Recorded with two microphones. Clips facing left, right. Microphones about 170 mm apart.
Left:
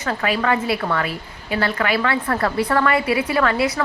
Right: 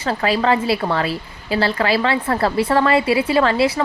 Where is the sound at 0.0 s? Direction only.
30° right (ahead or behind).